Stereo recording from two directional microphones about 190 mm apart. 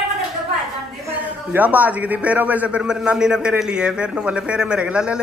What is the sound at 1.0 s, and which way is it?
A man's voice, 10° right (ahead or behind).